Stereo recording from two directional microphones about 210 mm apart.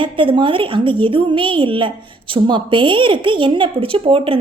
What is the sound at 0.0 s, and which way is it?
A woman's voice, 25° right (ahead or behind).